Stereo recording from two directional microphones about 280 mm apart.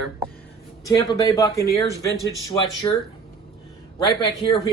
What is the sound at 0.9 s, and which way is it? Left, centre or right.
Speech, centre.